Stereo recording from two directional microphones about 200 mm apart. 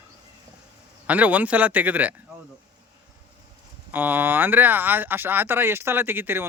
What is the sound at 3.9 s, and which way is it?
Speech, 10° right (ahead or behind).